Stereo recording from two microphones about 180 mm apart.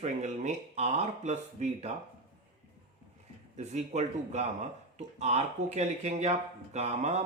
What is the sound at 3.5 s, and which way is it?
Speech, 40° right (ahead or behind).